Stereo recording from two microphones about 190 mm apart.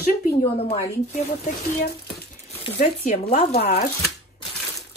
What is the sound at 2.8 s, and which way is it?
Speech, 35° left (ahead or behind).